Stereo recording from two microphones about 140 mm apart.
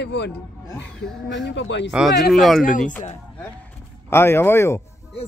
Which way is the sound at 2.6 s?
70° left (ahead or behind).